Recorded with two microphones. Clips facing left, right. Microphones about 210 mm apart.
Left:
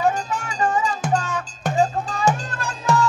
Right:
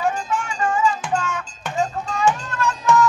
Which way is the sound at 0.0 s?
40° left (ahead or behind).